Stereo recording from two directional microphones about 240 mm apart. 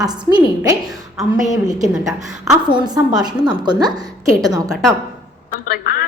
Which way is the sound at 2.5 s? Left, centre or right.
Centre.